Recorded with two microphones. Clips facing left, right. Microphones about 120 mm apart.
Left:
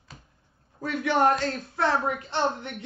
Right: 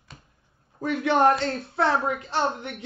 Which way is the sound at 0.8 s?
25° right (ahead or behind).